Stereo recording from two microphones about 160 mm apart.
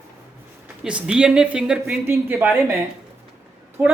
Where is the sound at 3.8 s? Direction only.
15° right (ahead or behind).